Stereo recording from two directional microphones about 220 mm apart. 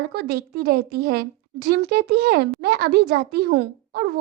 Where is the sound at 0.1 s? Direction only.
45° right (ahead or behind).